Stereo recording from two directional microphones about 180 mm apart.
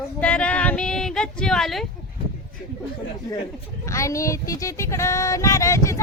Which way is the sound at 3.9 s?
15° left (ahead or behind).